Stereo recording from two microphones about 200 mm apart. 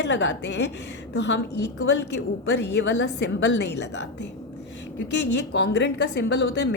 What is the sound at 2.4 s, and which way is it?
A woman's voice, 65° left (ahead or behind).